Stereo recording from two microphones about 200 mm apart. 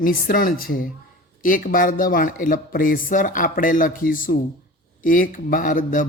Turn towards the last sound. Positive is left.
turn(degrees=40)  # may be behind; listen again after turning